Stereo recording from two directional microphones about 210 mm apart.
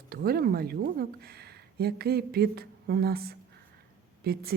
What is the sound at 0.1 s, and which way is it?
Speech, 45° right (ahead or behind).